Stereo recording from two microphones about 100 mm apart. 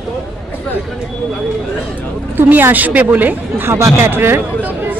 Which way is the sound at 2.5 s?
15° right (ahead or behind).